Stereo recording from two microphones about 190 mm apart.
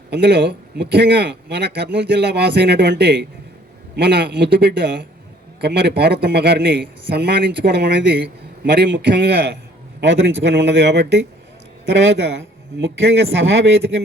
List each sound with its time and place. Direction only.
0.1 s a man's voice: 60° right (ahead or behind)
10.0 s speech: 70° right (ahead or behind)
12.7 s speech: 65° right (ahead or behind)